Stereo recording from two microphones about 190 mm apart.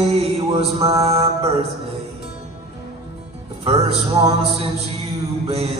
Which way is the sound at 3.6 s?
30° right (ahead or behind).